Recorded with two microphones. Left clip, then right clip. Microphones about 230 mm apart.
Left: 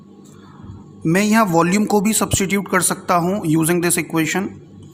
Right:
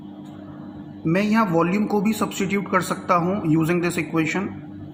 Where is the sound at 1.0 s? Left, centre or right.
Left.